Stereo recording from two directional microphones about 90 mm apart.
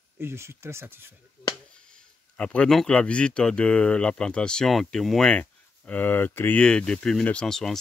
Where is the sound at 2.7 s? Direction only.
10° left (ahead or behind).